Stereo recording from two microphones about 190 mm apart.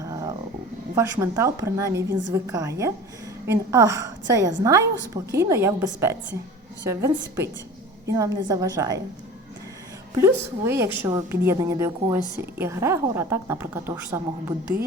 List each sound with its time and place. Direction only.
0.0 s a sound: 20° right (ahead or behind)
0.9 s a woman's voice: 15° right (ahead or behind)
10.2 s a woman's voice: 15° right (ahead or behind)